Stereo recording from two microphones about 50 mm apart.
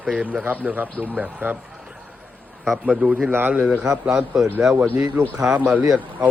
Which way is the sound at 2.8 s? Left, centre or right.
Centre.